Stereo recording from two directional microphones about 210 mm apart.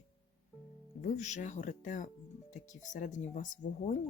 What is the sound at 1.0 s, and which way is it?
Speech, 35° left (ahead or behind).